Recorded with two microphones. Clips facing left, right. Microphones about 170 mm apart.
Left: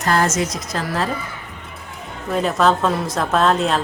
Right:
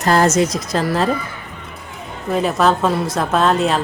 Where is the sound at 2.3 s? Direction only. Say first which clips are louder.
Right 1 dB; 5° right (ahead or behind).